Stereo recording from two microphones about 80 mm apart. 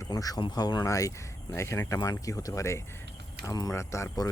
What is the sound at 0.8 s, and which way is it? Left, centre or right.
Speech, left.